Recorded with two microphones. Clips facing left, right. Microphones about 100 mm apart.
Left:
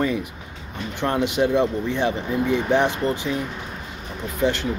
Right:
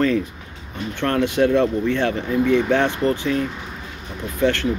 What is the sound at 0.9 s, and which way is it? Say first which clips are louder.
Speech: right 2 dB; 15° left (ahead or behind).